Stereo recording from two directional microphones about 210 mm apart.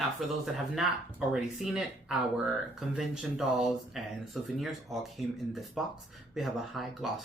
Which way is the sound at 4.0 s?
Centre (ahead or behind).